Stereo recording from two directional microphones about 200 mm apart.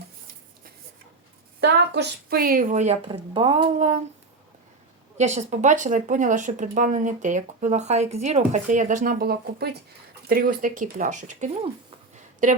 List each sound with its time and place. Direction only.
1.6 s speech: 50° right (ahead or behind); by 4.0 s 35° right (ahead or behind)
5.1 s speech: 35° right (ahead or behind)